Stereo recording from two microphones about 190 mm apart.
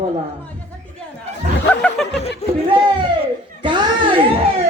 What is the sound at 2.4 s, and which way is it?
Speech, 35° left (ahead or behind).